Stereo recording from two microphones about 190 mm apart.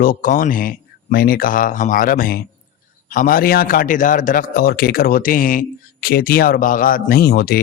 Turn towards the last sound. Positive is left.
turn(degrees=55)  # may be behind; listen again after turning